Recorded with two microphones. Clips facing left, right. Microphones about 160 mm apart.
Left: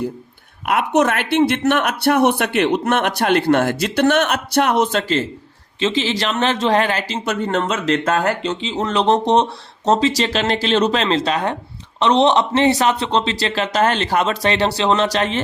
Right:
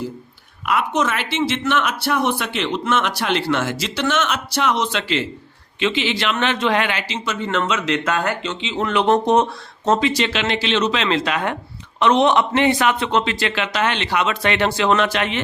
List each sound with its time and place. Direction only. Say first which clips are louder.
0.6 s a man's voice: left 4 dB; 60° left (ahead or behind); by 15.4 s 35° left (ahead or behind)